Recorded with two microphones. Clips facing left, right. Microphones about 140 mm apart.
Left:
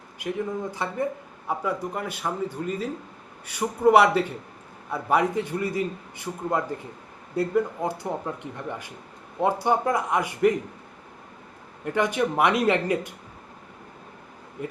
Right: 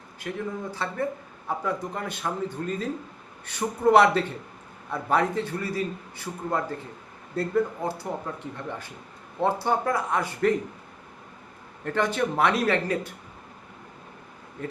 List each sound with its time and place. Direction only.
0.2 s a man's voice: 15° left (ahead or behind)
11.9 s a man's voice: 15° left (ahead or behind)
14.6 s a man's voice: 15° left (ahead or behind)